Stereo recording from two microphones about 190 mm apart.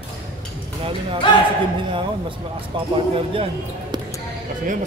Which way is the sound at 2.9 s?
30° right (ahead or behind).